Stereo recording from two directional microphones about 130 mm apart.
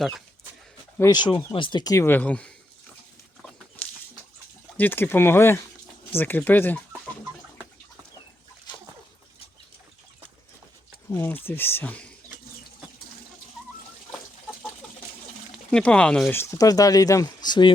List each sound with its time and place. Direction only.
1.1 s speech: 35° left (ahead or behind)
2.0 s speech: 10° left (ahead or behind)
4.8 s speech: 15° left (ahead or behind)
11.1 s speech: 15° left (ahead or behind)
15.5 s speech: 5° left (ahead or behind)
16.3 s speech: 20° left (ahead or behind)